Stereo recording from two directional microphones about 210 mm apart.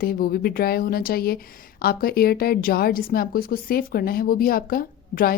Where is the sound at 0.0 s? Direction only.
45° left (ahead or behind).